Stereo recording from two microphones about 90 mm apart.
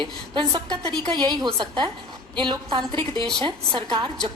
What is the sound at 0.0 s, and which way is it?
A woman's voice, 55° right (ahead or behind).